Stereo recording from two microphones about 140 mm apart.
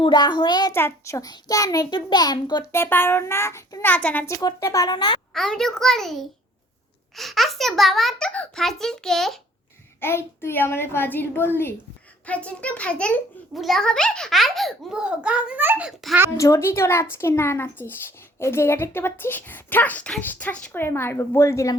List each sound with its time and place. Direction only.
0.0 s a child's voice: 35° left (ahead or behind)
0.7 s a child's voice: 15° left (ahead or behind)
2.7 s speech: 15° left (ahead or behind)
4.4 s a child's voice: 25° left (ahead or behind)
5.3 s a child's voice: 5° left (ahead or behind)
10.0 s a child's voice: 15° left (ahead or behind); by 15.9 s 15° right (ahead or behind)
16.4 s a child's voice: 20° left (ahead or behind)